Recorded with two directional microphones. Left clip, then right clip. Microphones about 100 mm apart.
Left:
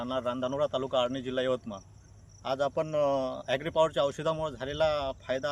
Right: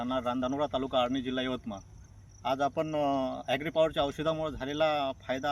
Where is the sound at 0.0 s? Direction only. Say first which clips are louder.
Even; 35° left (ahead or behind).